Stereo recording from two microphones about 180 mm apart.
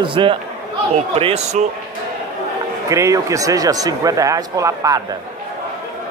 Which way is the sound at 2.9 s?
15° right (ahead or behind).